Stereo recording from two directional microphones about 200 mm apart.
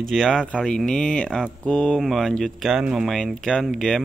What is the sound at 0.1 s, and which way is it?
Speech, centre (ahead or behind).